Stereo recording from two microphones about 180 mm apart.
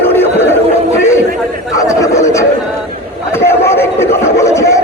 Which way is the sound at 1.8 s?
20° left (ahead or behind).